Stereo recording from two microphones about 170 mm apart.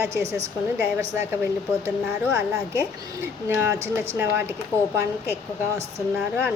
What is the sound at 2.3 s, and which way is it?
A woman's voice, 15° right (ahead or behind).